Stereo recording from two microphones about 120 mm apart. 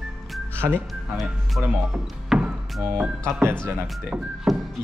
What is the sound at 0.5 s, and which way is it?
Speech, 20° right (ahead or behind).